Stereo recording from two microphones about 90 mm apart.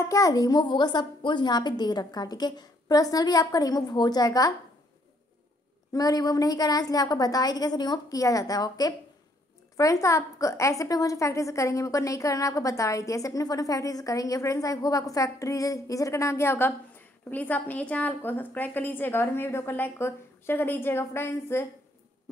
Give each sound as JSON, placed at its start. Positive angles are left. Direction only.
{"t": 0.0, "sound": "a woman's voice", "side_deg": 40}
{"t": 5.9, "sound": "a woman's voice", "side_deg": 45}